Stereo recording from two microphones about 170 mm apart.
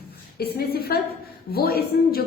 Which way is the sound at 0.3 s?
70° left (ahead or behind).